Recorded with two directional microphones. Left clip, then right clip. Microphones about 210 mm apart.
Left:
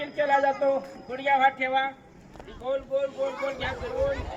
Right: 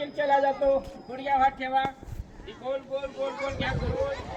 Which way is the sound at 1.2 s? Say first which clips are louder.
Left 2 dB; 15° left (ahead or behind).